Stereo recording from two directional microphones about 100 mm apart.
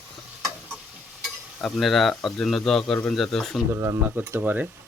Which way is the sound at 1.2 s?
Centre (ahead or behind).